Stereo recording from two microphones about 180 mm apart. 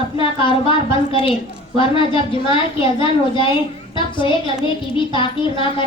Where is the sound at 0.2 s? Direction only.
30° left (ahead or behind).